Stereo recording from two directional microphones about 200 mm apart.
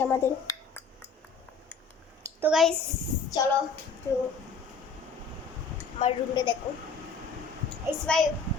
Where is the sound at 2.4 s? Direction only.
Centre (ahead or behind).